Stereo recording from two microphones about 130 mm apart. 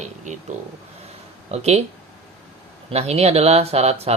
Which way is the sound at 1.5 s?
55° right (ahead or behind).